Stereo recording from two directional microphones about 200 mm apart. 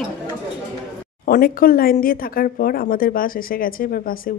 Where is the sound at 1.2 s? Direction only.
45° left (ahead or behind).